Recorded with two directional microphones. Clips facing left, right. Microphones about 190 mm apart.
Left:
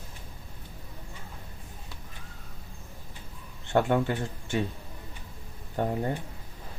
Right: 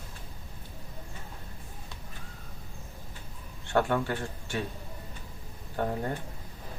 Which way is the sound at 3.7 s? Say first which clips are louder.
Left 2 dB; 20° left (ahead or behind).